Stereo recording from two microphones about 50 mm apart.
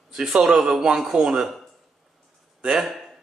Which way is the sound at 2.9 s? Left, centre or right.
Centre.